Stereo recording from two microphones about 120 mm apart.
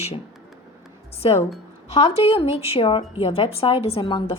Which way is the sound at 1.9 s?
50° left (ahead or behind).